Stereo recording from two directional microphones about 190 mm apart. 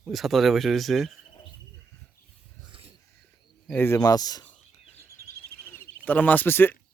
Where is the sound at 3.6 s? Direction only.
10° left (ahead or behind).